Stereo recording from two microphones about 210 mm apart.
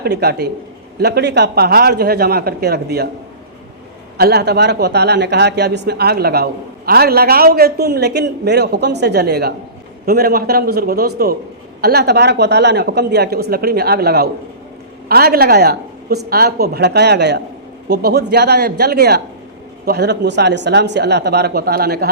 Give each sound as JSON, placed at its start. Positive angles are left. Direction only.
{"t": 0.0, "sound": "speech", "side_deg": -50}
{"t": 4.2, "sound": "speech", "side_deg": -50}